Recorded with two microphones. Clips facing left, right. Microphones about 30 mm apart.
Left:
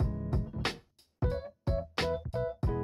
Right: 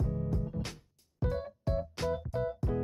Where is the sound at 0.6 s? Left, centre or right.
Left.